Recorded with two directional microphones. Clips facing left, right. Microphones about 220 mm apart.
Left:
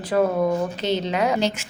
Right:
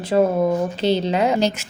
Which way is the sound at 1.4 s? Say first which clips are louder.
Right 3 dB; 40° right (ahead or behind).